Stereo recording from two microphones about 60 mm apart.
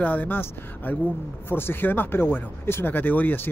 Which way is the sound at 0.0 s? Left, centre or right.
Left.